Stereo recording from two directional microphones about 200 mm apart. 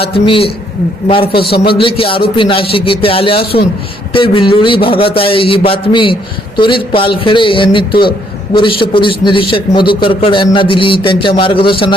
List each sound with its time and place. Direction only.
0.0 s a man's voice: 25° left (ahead or behind)
3.4 s a man's voice: 50° left (ahead or behind)
4.1 s a man's voice: 25° left (ahead or behind)